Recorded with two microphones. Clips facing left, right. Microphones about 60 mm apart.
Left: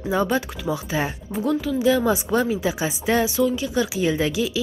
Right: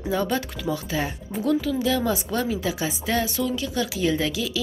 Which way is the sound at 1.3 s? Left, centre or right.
Centre.